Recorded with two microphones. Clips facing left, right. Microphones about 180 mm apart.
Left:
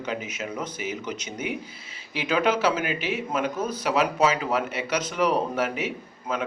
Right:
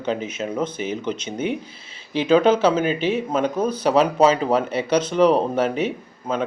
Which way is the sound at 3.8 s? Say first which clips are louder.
Right 6 dB; 30° right (ahead or behind).